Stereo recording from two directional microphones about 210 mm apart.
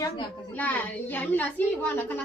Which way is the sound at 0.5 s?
10° left (ahead or behind).